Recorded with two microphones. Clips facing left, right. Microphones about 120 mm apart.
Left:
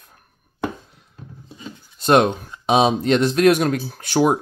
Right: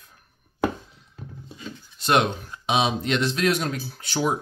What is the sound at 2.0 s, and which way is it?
Speech, 40° left (ahead or behind).